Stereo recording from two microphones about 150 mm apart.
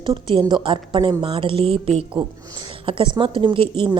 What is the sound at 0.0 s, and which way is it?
Speech, 35° right (ahead or behind).